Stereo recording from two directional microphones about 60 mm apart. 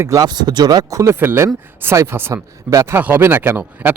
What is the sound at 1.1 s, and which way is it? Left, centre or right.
Speech, right.